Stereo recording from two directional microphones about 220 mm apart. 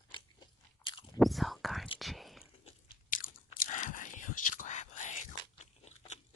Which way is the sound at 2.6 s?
35° left (ahead or behind).